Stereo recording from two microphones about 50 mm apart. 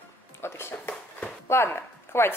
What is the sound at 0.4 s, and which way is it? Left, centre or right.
Speech, left.